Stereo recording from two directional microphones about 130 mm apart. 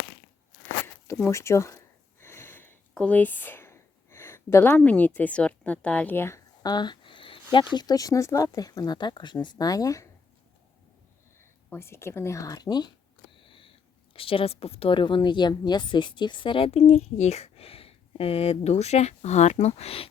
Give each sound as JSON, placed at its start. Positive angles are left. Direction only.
{"t": 1.0, "sound": "speech", "side_deg": 20}
{"t": 2.2, "sound": "sniff", "side_deg": 20}
{"t": 2.9, "sound": "speech", "side_deg": 10}
{"t": 11.7, "sound": "speech", "side_deg": 20}
{"t": 16.8, "sound": "speech", "side_deg": 60}